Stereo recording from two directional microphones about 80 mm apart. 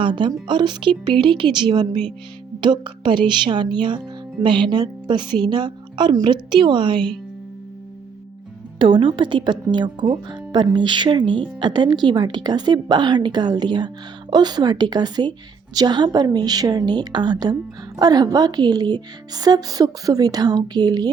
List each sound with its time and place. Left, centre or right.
0.0 s a woman's voice: right
4.4 s a woman's voice: right
8.8 s a woman's voice: right
11.6 s a woman's voice: right